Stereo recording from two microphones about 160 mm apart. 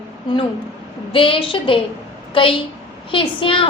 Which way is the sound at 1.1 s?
35° left (ahead or behind).